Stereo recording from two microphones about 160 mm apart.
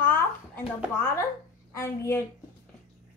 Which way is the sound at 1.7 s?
15° left (ahead or behind).